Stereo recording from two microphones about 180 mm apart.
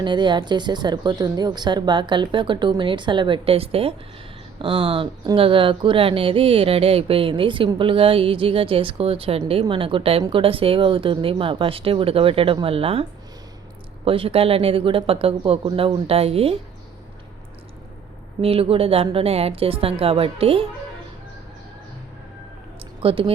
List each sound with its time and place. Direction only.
0.0 s speech: 25° right (ahead or behind)
18.4 s speech: 30° right (ahead or behind)
23.0 s speech: 30° right (ahead or behind)